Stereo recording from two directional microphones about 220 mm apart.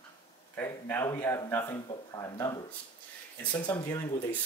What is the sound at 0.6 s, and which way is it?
Speech, 10° left (ahead or behind).